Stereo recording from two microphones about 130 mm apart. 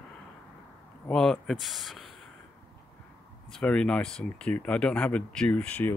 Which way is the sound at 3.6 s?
10° left (ahead or behind).